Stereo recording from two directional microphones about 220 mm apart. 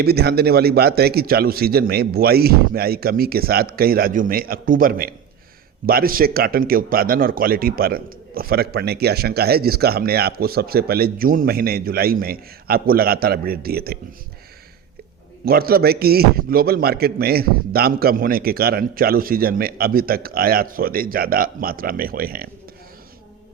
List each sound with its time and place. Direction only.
0.0 s speech: 45° right (ahead or behind)
15.4 s speech: 45° right (ahead or behind)